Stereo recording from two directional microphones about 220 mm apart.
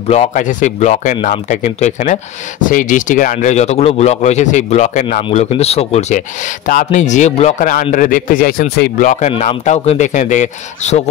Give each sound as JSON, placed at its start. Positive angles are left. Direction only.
{"t": 0.1, "sound": "speech", "side_deg": 30}